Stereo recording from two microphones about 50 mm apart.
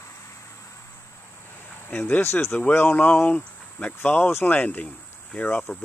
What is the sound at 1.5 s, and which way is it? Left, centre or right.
Cricket, left.